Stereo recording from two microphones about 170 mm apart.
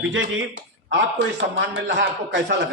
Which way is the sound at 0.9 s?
90° right.